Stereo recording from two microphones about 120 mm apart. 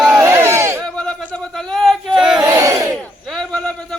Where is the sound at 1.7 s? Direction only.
Centre (ahead or behind).